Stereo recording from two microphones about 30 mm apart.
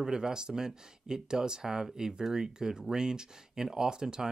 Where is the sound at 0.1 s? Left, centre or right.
Right.